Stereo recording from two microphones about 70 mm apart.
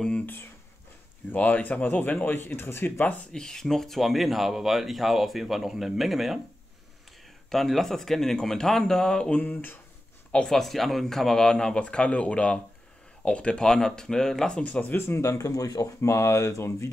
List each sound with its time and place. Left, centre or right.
1.3 s speech: left
3.3 s speech: centre
7.4 s speech: centre
9.4 s speech: left
10.3 s speech: centre
14.6 s speech: left